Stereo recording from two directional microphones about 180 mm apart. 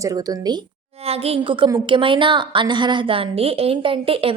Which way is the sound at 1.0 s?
35° right (ahead or behind).